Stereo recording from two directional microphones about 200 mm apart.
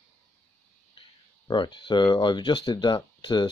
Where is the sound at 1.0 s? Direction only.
25° left (ahead or behind).